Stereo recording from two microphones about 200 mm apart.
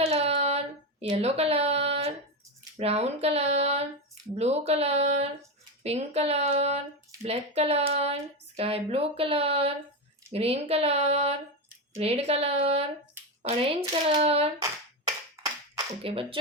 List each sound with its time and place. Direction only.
0.0 s child singing: 30° right (ahead or behind)
2.7 s speech: 30° right (ahead or behind)
16.0 s speech: 25° right (ahead or behind)